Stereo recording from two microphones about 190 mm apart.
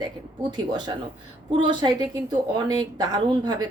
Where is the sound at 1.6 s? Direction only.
25° right (ahead or behind).